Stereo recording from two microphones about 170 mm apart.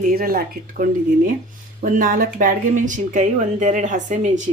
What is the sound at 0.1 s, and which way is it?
A woman's voice, 60° right (ahead or behind).